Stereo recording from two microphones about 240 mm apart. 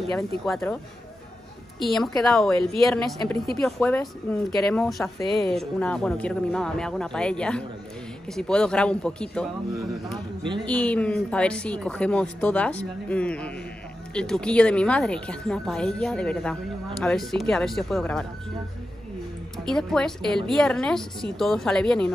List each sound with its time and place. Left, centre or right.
0.6 s speech: centre
10.1 s speech: centre
10.6 s speech: centre
19.6 s speech: centre